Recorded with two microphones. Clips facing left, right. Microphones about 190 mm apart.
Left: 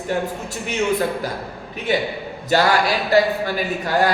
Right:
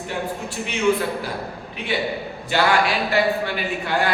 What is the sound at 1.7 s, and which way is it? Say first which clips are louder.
A man's voice: left 3 dB; 45° left (ahead or behind).